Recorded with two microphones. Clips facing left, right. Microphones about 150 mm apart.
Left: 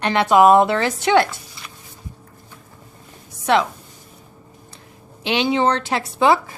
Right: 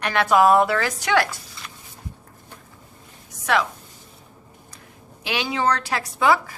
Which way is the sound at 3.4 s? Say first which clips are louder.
Left 4 dB; 25° left (ahead or behind).